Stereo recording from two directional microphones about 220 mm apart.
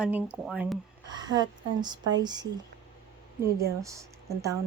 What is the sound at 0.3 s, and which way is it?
Speech, 5° right (ahead or behind).